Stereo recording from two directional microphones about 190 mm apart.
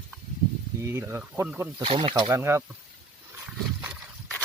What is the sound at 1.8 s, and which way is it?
Speech, 30° right (ahead or behind).